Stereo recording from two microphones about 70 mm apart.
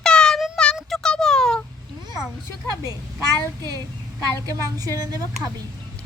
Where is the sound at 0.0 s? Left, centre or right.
Centre.